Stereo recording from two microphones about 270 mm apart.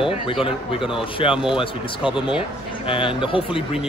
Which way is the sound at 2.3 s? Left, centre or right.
Centre.